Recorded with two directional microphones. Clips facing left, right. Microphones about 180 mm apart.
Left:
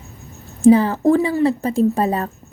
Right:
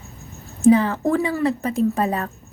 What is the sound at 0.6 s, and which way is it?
A woman's voice, 30° left (ahead or behind).